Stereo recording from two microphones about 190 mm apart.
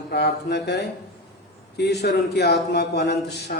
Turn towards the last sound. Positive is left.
turn(degrees=60)  # may be behind; listen again after turning